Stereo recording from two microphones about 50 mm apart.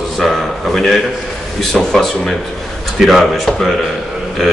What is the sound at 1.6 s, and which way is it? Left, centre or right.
Speech, centre.